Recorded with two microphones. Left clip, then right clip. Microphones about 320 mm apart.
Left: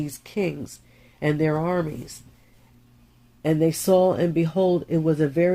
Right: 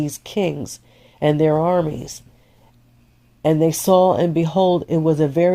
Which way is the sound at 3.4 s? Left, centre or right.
Right.